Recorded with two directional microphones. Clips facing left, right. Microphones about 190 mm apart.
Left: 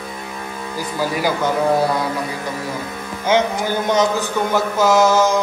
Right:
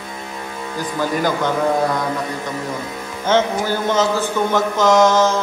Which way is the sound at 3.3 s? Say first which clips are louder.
Even; 15° left (ahead or behind).